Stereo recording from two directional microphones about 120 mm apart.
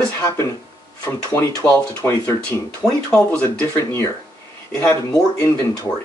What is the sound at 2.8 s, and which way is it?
Speech, 5° left (ahead or behind).